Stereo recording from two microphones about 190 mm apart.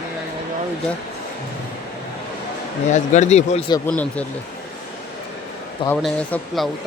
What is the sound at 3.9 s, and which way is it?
Speech, 5° left (ahead or behind).